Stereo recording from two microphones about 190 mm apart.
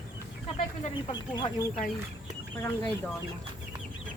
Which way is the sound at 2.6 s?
10° left (ahead or behind).